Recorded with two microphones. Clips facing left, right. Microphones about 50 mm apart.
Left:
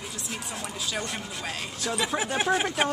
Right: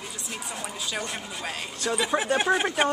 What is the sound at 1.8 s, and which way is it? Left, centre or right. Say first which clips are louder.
Speech: right 3 dB; centre.